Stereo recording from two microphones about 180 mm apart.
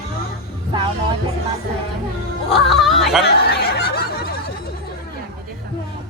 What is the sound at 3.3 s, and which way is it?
Snicker, 60° left (ahead or behind).